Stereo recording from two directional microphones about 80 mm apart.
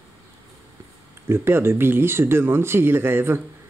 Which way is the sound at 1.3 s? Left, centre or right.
Right.